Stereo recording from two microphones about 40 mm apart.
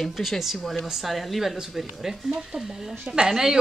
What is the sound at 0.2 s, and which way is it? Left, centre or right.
Speech, centre.